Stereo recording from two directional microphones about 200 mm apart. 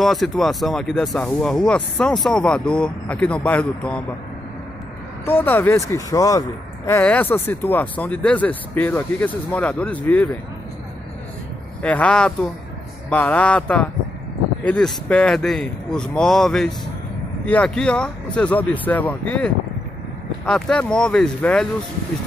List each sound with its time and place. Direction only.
0.0 s speech: centre (ahead or behind)
5.2 s speech: 10° left (ahead or behind)
11.8 s speech: 5° left (ahead or behind)